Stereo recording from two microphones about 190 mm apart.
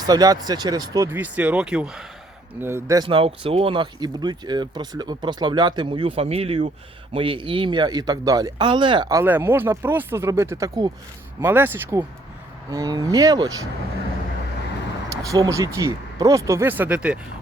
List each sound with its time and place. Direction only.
0.0 s speech: 20° right (ahead or behind)
15.1 s speech: 15° right (ahead or behind)